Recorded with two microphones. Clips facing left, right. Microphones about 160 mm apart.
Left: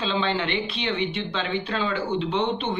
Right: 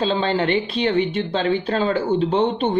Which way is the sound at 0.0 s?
40° right (ahead or behind).